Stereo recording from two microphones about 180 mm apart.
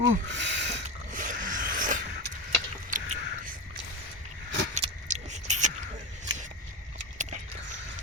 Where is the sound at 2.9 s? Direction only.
45° right (ahead or behind).